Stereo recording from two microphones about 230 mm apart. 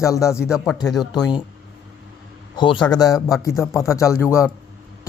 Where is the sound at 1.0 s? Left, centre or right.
Centre.